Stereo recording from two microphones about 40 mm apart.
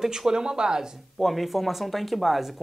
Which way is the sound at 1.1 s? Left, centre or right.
Centre.